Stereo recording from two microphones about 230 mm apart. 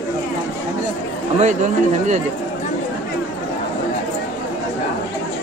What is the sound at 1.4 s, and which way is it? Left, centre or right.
Speech, right.